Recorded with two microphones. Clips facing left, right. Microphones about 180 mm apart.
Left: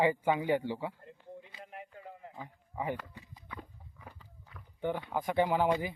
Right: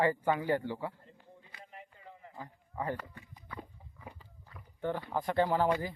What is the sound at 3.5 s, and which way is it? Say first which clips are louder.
Walk: right 1 dB; 5° right (ahead or behind).